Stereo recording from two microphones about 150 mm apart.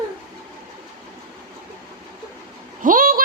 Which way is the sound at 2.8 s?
70° right (ahead or behind).